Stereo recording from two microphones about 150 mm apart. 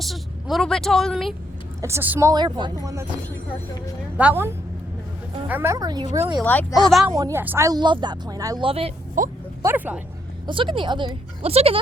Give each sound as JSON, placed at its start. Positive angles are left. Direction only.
{"t": 0.0, "sound": "a woman's voice", "side_deg": 0}
{"t": 1.8, "sound": "a woman's voice", "side_deg": -15}
{"t": 2.3, "sound": "speech", "side_deg": -30}
{"t": 4.2, "sound": "a woman's voice", "side_deg": -15}
{"t": 6.4, "sound": "speech", "side_deg": 10}
{"t": 6.8, "sound": "a woman's voice", "side_deg": 0}
{"t": 7.2, "sound": "a woman's voice", "side_deg": -20}
{"t": 7.7, "sound": "speech", "side_deg": -30}
{"t": 8.6, "sound": "speech", "side_deg": -40}
{"t": 9.2, "sound": "speech", "side_deg": -60}
{"t": 9.6, "sound": "a woman's voice", "side_deg": -10}
{"t": 10.4, "sound": "speech", "side_deg": -35}